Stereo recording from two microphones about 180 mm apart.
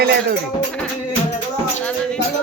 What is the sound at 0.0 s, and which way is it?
Music, 60° right (ahead or behind).